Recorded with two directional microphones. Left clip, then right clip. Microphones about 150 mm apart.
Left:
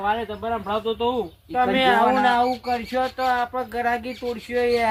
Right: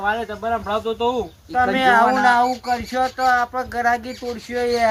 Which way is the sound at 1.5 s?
15° left (ahead or behind).